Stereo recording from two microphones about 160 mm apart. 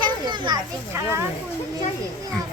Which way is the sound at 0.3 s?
25° right (ahead or behind).